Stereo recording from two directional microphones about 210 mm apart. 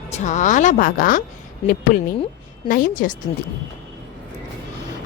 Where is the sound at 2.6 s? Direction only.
40° left (ahead or behind).